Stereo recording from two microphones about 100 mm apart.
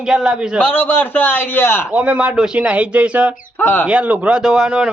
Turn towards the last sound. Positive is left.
turn(degrees=-10)  # may be behind; listen again after turning